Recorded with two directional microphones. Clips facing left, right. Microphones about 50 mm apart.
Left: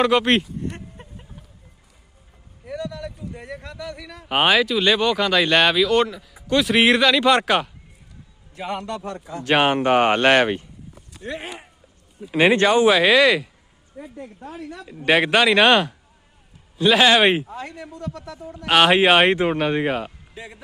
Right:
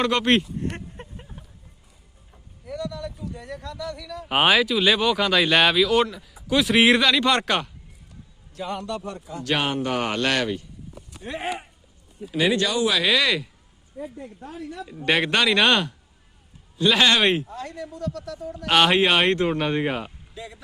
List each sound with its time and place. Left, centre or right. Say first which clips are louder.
0.0 s speech: left 3 dB; centre
0.9 s a sound: right 2 dB; centre
2.6 s speech: left 1 dB; left
4.3 s speech: left 1 dB; centre
8.7 s a man's voice: left 2 dB; left
9.4 s a man's voice: left 6 dB; left
11.2 s speech: left 2 dB; centre
12.4 s speech: left 6 dB; left
13.1 s speech: left 6 dB; centre
14.8 s a man's voice: left 4 dB; centre; by 18.5 s left
18.5 s speech: left 3 dB; centre